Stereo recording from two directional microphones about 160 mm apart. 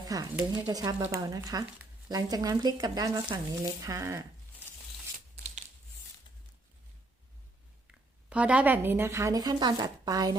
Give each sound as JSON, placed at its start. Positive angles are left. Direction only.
{"t": 0.1, "sound": "speech", "side_deg": -25}
{"t": 8.3, "sound": "speech", "side_deg": -10}